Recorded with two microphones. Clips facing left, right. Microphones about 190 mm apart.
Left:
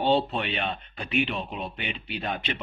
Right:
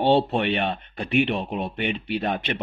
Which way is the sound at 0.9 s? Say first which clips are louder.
Right 6 dB; 50° right (ahead or behind).